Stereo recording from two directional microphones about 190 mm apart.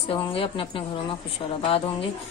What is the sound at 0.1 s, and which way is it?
A woman's voice, 30° left (ahead or behind).